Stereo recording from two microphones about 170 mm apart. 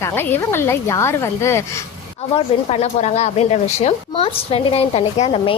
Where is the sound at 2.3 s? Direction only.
35° left (ahead or behind).